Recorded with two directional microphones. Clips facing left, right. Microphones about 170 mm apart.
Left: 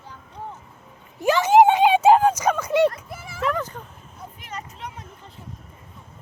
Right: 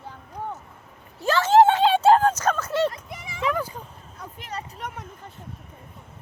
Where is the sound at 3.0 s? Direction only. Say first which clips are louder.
Left 2 dB; 5° left (ahead or behind).